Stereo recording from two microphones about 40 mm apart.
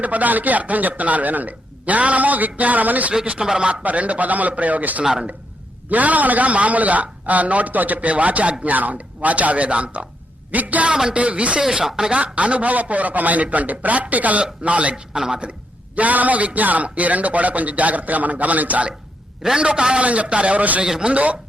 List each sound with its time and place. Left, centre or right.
0.0 s speech: right
3.4 s speech: centre
3.8 s speech: right
10.8 s a man's voice: centre
11.1 s speech: right
11.7 s speech: centre
12.1 s speech: right
15.1 s a man's voice: right
16.0 s speech: right
19.4 s a man's voice: right
20.8 s a man's voice: centre
21.1 s speech: right